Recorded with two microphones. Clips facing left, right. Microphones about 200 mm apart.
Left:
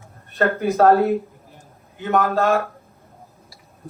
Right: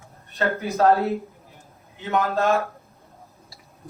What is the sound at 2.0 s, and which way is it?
Speech, 50° left (ahead or behind).